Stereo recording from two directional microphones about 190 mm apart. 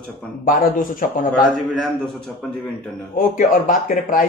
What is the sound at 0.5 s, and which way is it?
Speech, 45° left (ahead or behind).